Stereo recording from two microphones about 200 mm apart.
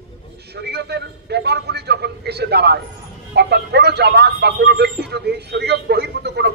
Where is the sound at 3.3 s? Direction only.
55° right (ahead or behind).